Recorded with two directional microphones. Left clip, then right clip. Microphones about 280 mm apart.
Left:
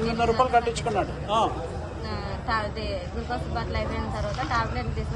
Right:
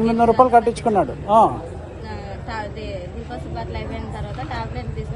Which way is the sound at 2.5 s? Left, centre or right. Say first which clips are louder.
Left 2 dB; centre.